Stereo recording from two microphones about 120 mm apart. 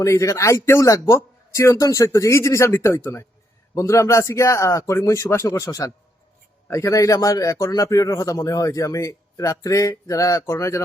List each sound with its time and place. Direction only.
0.0 s a man's voice: 25° left (ahead or behind)